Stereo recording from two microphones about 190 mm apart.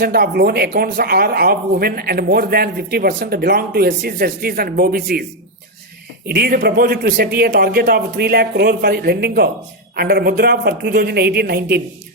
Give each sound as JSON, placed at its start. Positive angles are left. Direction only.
{"t": 0.0, "sound": "speech", "side_deg": -55}
{"t": 6.2, "sound": "speech", "side_deg": -55}